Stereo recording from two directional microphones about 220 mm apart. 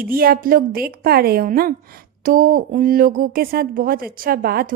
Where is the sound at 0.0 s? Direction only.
40° right (ahead or behind).